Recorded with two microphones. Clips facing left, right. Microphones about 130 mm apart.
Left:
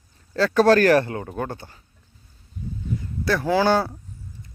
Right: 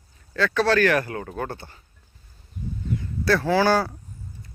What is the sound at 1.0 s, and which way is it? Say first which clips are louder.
Speech: left 2 dB; 25° left (ahead or behind).